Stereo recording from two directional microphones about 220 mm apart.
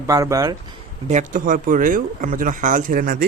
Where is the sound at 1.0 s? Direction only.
35° right (ahead or behind).